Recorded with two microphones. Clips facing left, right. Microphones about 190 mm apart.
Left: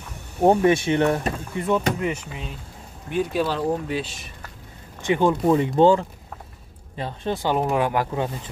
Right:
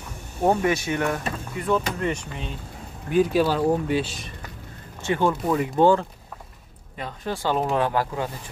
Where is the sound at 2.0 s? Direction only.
5° left (ahead or behind).